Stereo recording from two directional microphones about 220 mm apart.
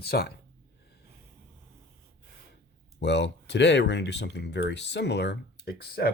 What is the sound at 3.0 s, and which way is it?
Speech, 50° left (ahead or behind).